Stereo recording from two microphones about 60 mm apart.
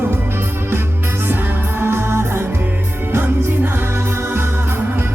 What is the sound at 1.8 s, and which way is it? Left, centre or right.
Music, right.